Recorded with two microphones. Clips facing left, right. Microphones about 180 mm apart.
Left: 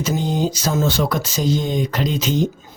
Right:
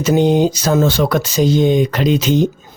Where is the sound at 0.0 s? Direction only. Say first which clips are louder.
Right 8 dB; 70° right (ahead or behind).